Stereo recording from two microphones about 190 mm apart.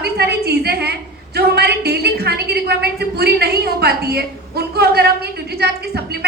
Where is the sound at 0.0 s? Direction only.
60° right (ahead or behind).